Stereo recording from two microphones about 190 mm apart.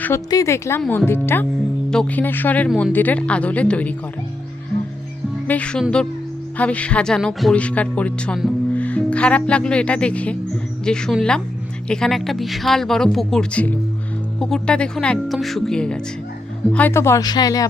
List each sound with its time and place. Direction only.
0.0 s speech: 15° left (ahead or behind)
5.5 s a woman's voice: 5° left (ahead or behind)